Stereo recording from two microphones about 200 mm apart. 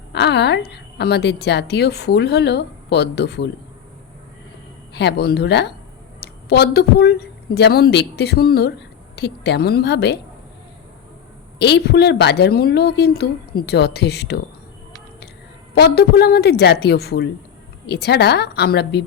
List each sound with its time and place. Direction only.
0.1 s a woman's voice: 60° left (ahead or behind)
4.9 s a woman's voice: 60° left (ahead or behind)
11.6 s a woman's voice: 55° left (ahead or behind)
15.7 s a woman's voice: 55° left (ahead or behind)